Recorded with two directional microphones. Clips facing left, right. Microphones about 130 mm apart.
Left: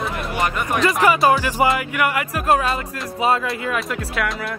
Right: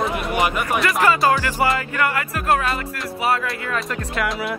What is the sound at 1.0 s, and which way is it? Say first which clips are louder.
Speech: left 2 dB; 20° left (ahead or behind).